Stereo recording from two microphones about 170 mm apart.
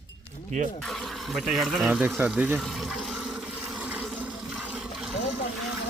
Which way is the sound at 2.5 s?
Centre (ahead or behind).